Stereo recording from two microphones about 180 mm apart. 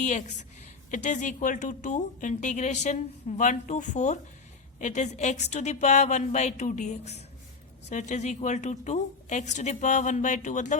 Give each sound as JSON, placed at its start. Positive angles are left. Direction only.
{"t": 0.0, "sound": "a woman's voice", "side_deg": 45}